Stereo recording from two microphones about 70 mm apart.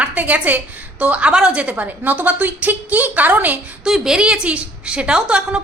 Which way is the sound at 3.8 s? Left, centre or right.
Centre.